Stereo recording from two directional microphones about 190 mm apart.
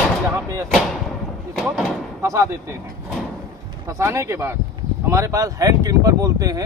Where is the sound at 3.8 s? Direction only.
15° right (ahead or behind).